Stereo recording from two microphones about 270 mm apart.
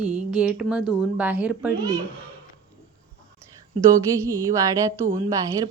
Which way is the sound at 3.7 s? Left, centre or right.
Right.